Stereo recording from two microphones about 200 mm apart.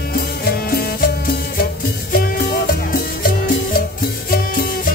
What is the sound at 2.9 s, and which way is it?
Music, 50° left (ahead or behind).